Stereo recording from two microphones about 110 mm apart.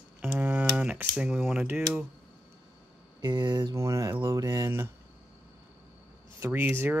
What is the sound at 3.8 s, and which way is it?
Speech, 25° right (ahead or behind).